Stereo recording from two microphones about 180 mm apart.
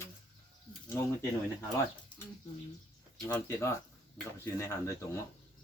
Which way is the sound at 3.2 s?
15° left (ahead or behind).